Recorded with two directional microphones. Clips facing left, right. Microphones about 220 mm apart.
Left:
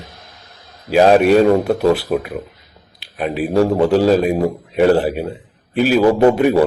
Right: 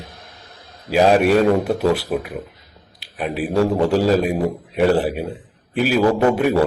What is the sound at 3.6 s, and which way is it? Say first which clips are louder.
Speech: left 3 dB; 10° left (ahead or behind).